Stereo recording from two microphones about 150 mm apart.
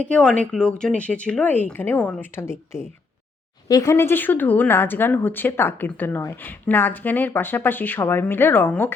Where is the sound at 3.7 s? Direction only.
20° left (ahead or behind).